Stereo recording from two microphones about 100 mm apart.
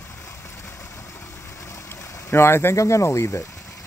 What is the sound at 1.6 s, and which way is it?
Stream, 30° left (ahead or behind).